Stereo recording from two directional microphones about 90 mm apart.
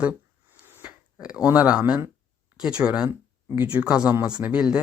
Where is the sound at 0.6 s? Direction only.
25° right (ahead or behind).